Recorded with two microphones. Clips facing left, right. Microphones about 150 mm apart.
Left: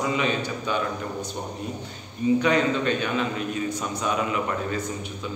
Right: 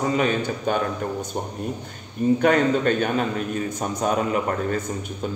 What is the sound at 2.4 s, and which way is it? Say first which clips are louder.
A man's voice: right 4 dB; 50° right (ahead or behind).